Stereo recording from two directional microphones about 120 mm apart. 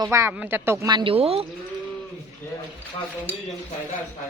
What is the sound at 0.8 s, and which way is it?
Speech, 40° right (ahead or behind).